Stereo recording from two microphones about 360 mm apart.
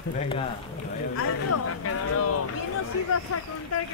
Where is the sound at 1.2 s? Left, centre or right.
Left.